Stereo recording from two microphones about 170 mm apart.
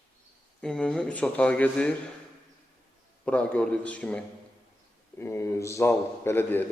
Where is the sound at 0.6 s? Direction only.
5° left (ahead or behind).